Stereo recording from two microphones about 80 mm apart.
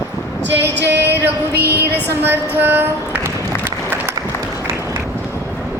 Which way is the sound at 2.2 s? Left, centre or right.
Right.